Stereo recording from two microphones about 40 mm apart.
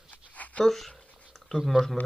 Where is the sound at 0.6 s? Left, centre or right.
Centre.